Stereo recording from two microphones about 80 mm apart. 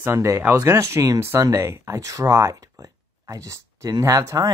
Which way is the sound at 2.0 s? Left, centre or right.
Right.